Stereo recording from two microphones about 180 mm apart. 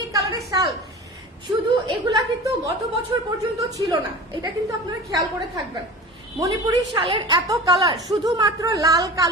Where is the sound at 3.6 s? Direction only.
20° right (ahead or behind).